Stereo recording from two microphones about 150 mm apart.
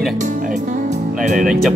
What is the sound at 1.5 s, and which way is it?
Speech, 5° right (ahead or behind).